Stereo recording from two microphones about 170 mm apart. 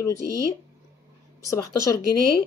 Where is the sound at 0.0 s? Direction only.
20° left (ahead or behind).